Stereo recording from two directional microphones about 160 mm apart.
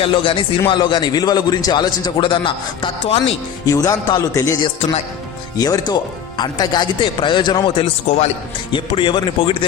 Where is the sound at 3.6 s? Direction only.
25° left (ahead or behind).